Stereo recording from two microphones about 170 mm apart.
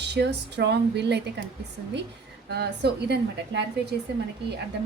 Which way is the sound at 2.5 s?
70° right (ahead or behind).